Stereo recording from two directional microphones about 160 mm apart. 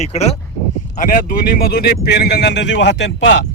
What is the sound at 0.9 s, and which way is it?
Speech, 55° left (ahead or behind).